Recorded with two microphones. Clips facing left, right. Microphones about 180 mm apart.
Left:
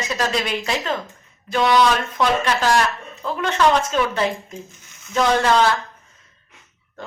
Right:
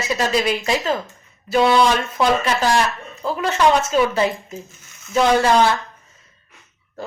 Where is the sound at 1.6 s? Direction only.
30° right (ahead or behind).